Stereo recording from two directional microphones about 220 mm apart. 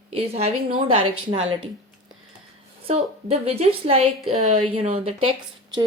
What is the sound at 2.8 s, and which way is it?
A woman's voice, 25° right (ahead or behind).